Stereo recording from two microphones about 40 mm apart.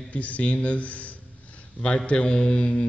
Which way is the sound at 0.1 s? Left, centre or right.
Left.